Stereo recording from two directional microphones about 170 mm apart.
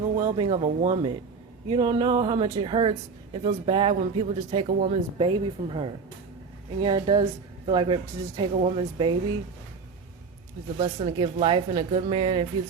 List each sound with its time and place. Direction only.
0.2 s speech: 30° right (ahead or behind)
10.8 s speech: 35° right (ahead or behind)